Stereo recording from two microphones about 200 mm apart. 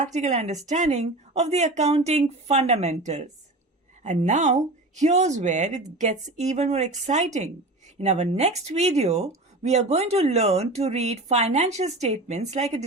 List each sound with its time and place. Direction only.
0.0 s speech: 35° right (ahead or behind)